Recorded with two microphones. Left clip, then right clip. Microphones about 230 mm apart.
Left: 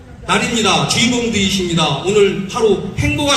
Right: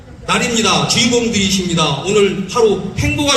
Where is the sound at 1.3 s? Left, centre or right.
Right.